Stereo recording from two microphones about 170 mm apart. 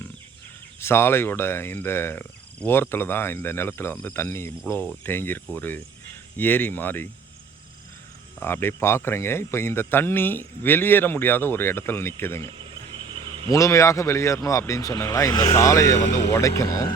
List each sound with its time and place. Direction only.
0.8 s speech: 15° left (ahead or behind)
8.4 s speech: 15° left (ahead or behind)
12.5 s cricket: 30° right (ahead or behind)
13.5 s speech: 20° left (ahead or behind)